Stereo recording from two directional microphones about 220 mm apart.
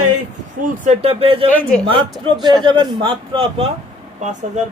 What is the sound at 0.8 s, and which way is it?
Speech, 30° right (ahead or behind).